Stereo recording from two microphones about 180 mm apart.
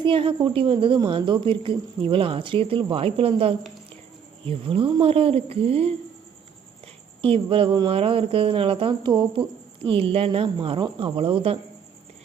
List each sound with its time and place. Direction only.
0.0 s a woman's voice: 30° right (ahead or behind)